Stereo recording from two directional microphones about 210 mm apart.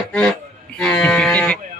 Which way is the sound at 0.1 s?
5° left (ahead or behind).